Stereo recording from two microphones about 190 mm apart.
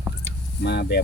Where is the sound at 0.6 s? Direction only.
60° left (ahead or behind).